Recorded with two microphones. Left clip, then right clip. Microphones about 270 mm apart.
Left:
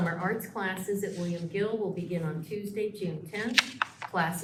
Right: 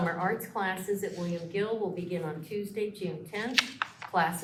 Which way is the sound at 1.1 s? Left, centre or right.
Left.